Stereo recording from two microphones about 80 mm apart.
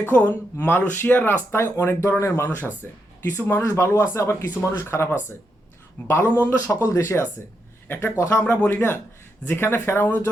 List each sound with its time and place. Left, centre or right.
0.0 s speech: left
6.3 s speech: left
8.4 s speech: left